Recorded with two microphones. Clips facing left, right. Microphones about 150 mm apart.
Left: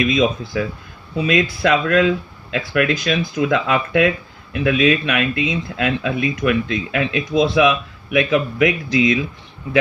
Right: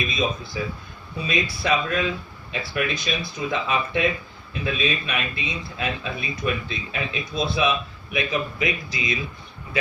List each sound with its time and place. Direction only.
0.0 s speech: 90° left